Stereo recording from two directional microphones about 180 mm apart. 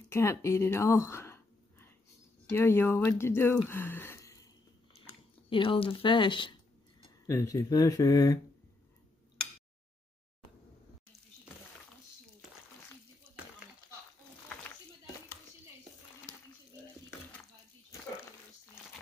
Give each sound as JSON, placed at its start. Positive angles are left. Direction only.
{"t": 0.1, "sound": "speech", "side_deg": 15}
{"t": 5.5, "sound": "speech", "side_deg": 30}